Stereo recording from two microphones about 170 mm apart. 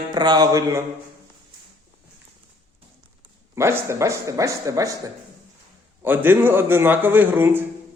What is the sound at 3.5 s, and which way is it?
A man's voice, 15° right (ahead or behind).